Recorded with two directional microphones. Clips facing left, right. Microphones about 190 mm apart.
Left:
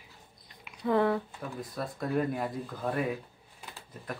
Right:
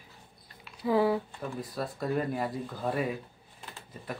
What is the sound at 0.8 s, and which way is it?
Speech, 5° right (ahead or behind).